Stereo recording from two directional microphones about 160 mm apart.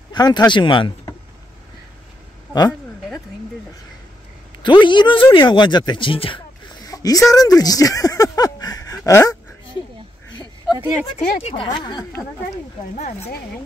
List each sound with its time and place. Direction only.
0.1 s speech: 25° left (ahead or behind)
4.6 s speech: 30° left (ahead or behind)
10.3 s a sound: 25° left (ahead or behind)
11.1 s speech: 35° left (ahead or behind)
12.9 s speech: 45° left (ahead or behind)